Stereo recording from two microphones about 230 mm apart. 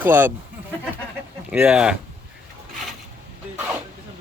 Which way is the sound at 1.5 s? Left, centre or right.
Centre.